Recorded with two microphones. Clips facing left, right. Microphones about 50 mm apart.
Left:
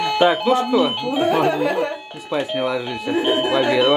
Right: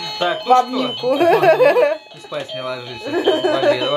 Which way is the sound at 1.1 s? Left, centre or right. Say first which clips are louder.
Right 7 dB; right.